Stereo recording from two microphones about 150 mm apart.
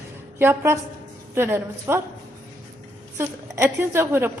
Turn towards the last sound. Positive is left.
turn(degrees=-15)  # may be behind; listen again after turning